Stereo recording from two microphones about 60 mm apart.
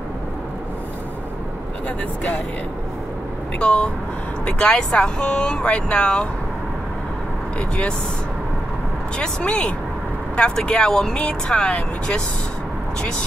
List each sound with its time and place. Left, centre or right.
3.5 s speech: centre
9.2 s speech: centre